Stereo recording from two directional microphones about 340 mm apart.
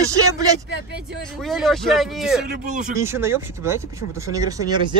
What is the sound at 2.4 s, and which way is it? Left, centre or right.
Speech, right.